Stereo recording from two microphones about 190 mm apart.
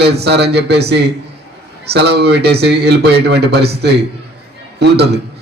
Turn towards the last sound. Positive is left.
turn(degrees=-60)  # may be behind; listen again after turning